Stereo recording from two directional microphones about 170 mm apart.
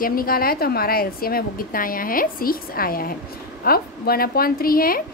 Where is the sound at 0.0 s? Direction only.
60° left (ahead or behind).